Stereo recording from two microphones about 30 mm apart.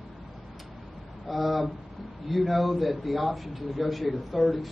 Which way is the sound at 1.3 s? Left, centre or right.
Centre.